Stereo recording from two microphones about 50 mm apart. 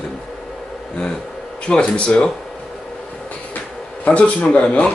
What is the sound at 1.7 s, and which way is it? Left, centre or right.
Speech, centre.